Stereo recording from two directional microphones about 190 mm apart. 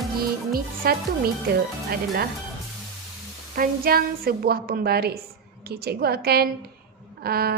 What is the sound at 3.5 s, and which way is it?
A woman's voice, 50° right (ahead or behind).